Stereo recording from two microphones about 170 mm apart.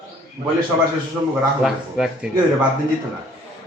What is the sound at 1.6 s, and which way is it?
Speech, 5° right (ahead or behind).